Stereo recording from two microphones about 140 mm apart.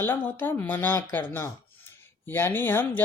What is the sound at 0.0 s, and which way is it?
Speech, 15° left (ahead or behind).